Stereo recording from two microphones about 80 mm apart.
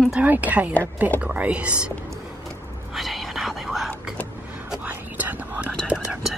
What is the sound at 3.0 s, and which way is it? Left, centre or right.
Whispering, centre.